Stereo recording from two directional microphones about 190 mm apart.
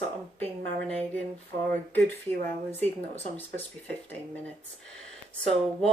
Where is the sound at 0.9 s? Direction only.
5° left (ahead or behind).